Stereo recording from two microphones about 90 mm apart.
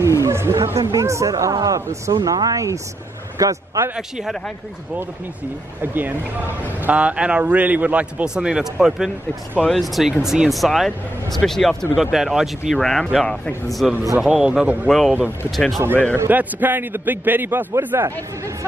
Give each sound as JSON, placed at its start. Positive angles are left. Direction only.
{"t": 0.2, "sound": "a man's voice", "side_deg": -30}
{"t": 5.8, "sound": "a man's voice", "side_deg": -20}
{"t": 15.9, "sound": "a man's voice", "side_deg": 15}
{"t": 16.3, "sound": "a man's voice", "side_deg": -20}